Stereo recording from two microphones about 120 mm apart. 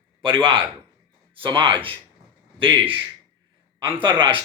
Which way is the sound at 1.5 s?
45° right (ahead or behind).